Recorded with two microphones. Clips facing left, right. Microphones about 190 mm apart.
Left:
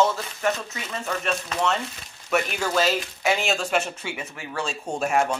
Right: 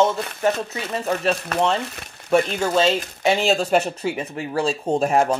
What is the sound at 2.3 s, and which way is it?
Speech, 30° right (ahead or behind).